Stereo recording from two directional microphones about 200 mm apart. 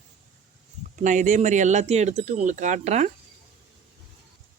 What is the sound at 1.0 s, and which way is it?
Speech, 40° right (ahead or behind).